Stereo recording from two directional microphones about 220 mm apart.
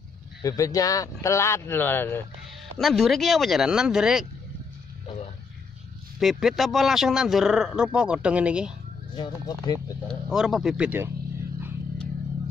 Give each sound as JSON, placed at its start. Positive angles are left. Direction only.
{"t": 0.4, "sound": "speech", "side_deg": 15}
{"t": 6.1, "sound": "speech", "side_deg": 0}
{"t": 9.1, "sound": "speech", "side_deg": 20}
{"t": 10.0, "sound": "speech", "side_deg": -5}